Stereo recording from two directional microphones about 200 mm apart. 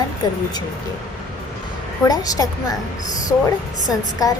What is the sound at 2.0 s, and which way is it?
Speech, 20° left (ahead or behind).